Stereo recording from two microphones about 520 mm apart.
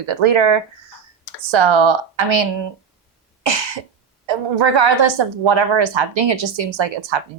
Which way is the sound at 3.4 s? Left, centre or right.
Right.